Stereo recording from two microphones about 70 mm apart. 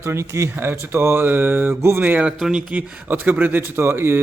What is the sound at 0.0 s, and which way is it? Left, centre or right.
A man's voice, right.